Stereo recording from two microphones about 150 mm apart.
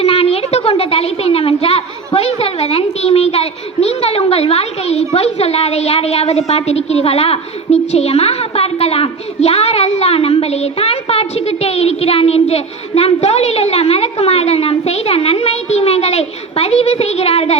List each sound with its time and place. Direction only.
0.0 s a woman's voice: 40° left (ahead or behind)